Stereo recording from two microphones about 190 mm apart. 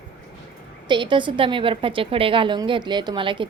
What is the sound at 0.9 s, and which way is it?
A woman's voice, 25° right (ahead or behind).